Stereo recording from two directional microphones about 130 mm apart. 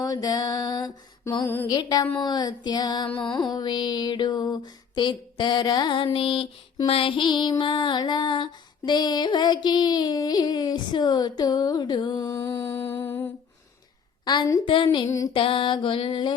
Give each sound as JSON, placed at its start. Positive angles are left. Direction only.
{"t": 0.0, "sound": "female singing", "side_deg": 30}
{"t": 6.1, "sound": "child singing", "side_deg": 45}
{"t": 6.8, "sound": "female singing", "side_deg": 45}
{"t": 14.3, "sound": "female singing", "side_deg": 30}
{"t": 14.6, "sound": "female singing", "side_deg": 40}